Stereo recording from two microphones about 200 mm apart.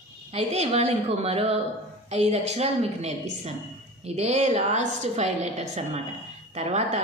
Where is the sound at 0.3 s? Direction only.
35° right (ahead or behind).